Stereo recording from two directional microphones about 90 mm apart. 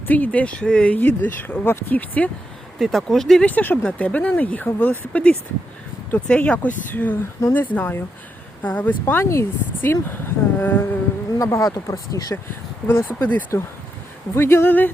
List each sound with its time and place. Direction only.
0.1 s speech: 20° left (ahead or behind)
2.7 s speech: centre (ahead or behind)
3.4 s speech: 20° left (ahead or behind)
11.3 s speech: 40° left (ahead or behind)
12.9 s speech: 25° left (ahead or behind)